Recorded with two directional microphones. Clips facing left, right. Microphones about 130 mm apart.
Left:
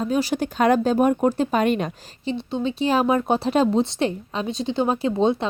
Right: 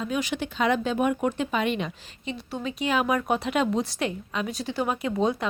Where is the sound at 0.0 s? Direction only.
35° left (ahead or behind).